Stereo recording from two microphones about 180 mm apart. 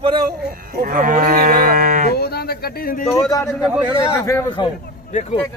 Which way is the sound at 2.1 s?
60° left (ahead or behind).